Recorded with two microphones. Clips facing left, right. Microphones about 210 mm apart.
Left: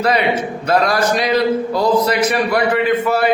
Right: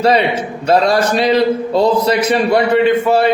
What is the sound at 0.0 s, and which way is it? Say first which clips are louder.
A man's voice: right 3 dB; 30° right (ahead or behind).